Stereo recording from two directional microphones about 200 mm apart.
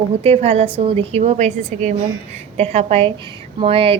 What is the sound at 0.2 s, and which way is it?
A woman's voice, 30° right (ahead or behind).